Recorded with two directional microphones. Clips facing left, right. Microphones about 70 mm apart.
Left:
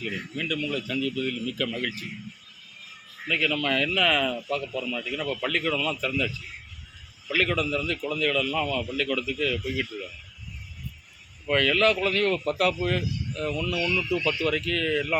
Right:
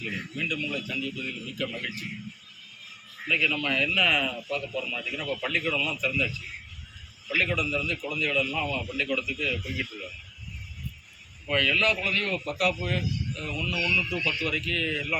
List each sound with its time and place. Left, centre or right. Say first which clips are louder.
0.3 s a man's voice: left 3 dB; left
1.0 s speech: left 6 dB; left
3.2 s a man's voice: left 1 dB; left
7.3 s a man's voice: left 2 dB; left
11.5 s speech: left 3 dB; left